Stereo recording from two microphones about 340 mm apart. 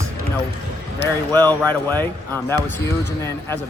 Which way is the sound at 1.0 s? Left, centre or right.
Centre.